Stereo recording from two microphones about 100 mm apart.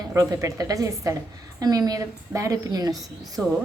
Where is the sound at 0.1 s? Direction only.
30° right (ahead or behind).